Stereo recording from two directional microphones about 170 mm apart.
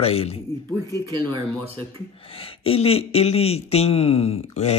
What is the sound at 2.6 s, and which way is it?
Speech, 35° left (ahead or behind).